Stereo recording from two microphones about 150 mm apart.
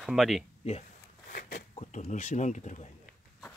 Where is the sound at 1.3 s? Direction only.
75° left (ahead or behind).